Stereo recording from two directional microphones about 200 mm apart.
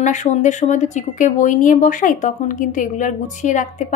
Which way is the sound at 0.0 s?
35° left (ahead or behind).